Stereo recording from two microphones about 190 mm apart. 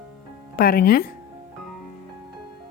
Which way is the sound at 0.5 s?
50° left (ahead or behind).